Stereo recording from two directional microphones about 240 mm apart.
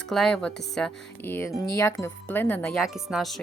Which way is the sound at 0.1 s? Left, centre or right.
Centre.